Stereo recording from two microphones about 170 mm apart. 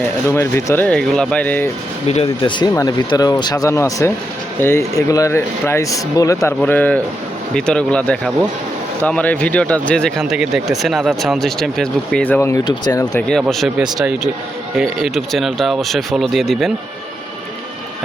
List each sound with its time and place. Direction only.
0.0 s speech: 15° left (ahead or behind)
2.0 s speech: 35° left (ahead or behind)
13.1 s speech: 5° left (ahead or behind)